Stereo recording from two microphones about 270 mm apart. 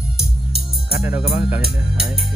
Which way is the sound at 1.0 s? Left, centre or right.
Centre.